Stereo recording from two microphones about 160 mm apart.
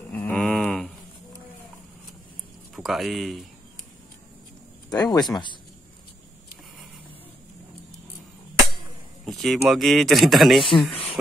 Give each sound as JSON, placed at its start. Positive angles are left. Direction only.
{"t": 0.1, "sound": "a sound", "side_deg": 10}
{"t": 2.7, "sound": "speech", "side_deg": 0}
{"t": 4.8, "sound": "speech", "side_deg": 25}
{"t": 9.2, "sound": "speech", "side_deg": 0}